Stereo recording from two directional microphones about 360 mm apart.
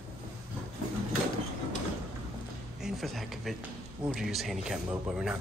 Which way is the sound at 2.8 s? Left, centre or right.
Centre.